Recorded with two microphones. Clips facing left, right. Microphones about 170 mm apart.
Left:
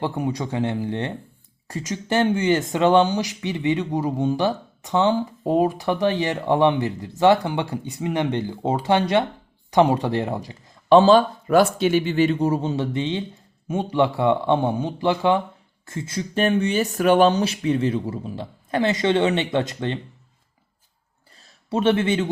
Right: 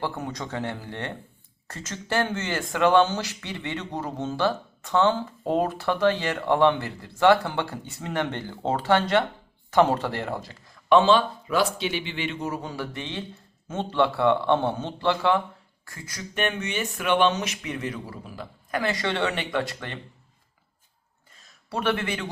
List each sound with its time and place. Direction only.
0.0 s speech: 15° left (ahead or behind)
10.8 s speech: 35° left (ahead or behind)
21.7 s speech: 20° left (ahead or behind)